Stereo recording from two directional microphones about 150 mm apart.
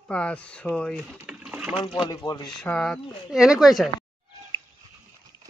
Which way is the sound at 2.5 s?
5° left (ahead or behind).